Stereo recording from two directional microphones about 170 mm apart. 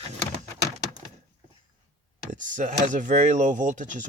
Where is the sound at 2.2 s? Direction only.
50° right (ahead or behind).